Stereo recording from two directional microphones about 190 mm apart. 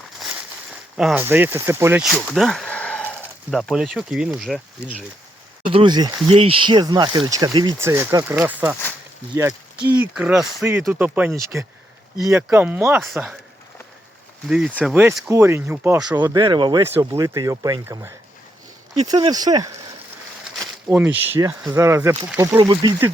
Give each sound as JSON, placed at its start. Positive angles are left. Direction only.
{"t": 0.2, "sound": "a sound", "side_deg": -5}
{"t": 2.2, "sound": "a sound", "side_deg": 0}
{"t": 3.5, "sound": "speech", "side_deg": 0}
{"t": 5.6, "sound": "speech", "side_deg": -25}
{"t": 10.0, "sound": "speech", "side_deg": -5}
{"t": 14.4, "sound": "speech", "side_deg": -5}
{"t": 19.2, "sound": "speech", "side_deg": -20}
{"t": 20.6, "sound": "speech", "side_deg": -5}